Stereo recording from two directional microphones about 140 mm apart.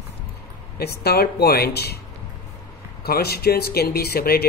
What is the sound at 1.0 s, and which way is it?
Speech, 90° left.